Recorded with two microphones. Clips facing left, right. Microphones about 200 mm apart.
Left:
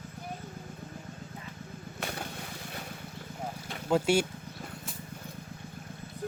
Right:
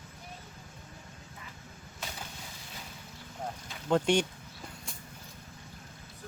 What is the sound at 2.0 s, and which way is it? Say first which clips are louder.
Vehicle: left 6 dB; 60° left (ahead or behind).